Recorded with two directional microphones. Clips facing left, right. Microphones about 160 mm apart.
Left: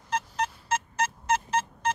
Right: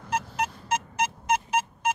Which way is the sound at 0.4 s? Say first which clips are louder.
Right 1 dB; 15° right (ahead or behind).